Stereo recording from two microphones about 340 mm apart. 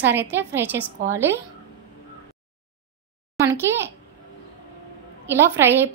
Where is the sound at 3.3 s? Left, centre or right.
Centre.